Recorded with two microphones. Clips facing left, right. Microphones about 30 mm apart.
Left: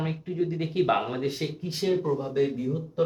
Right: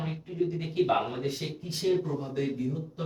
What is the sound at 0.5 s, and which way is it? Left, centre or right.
Speech, left.